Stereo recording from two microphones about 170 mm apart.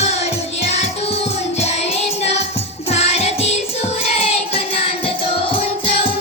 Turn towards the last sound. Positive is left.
turn(degrees=30)  # may be behind; listen again after turning